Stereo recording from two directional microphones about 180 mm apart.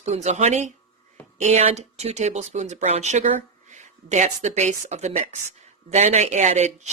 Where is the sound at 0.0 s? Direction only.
40° right (ahead or behind).